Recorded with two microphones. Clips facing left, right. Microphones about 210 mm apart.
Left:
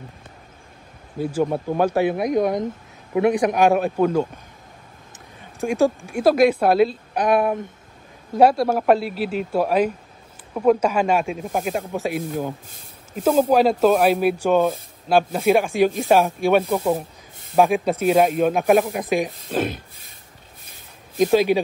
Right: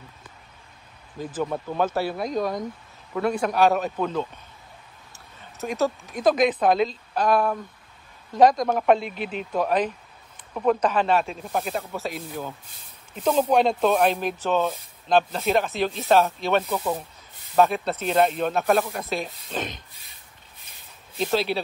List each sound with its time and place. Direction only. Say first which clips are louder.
1.1 s speech: left 6 dB; 10° left (ahead or behind)
5.4 s speech: left 6 dB; 15° left (ahead or behind)
7.2 s speech: left 3 dB; 20° left (ahead or behind)
8.3 s speech: left 2 dB; 10° left (ahead or behind)
21.2 s speech: left 8 dB; 10° left (ahead or behind)